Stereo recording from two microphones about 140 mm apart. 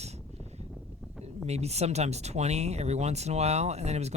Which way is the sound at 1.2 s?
50° right (ahead or behind).